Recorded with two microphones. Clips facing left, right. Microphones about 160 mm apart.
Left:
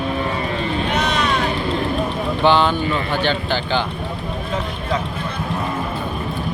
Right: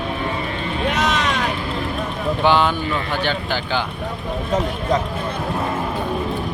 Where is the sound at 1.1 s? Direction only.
90° right.